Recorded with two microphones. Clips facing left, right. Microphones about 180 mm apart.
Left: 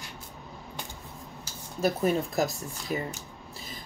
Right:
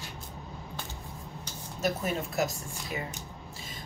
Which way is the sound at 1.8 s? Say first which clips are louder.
Left 5 dB; 35° left (ahead or behind).